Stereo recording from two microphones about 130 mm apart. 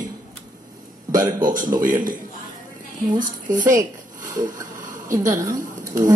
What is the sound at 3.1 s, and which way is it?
Speech, 90° right.